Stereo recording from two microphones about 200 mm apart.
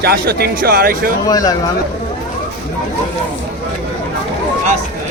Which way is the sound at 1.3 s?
20° left (ahead or behind).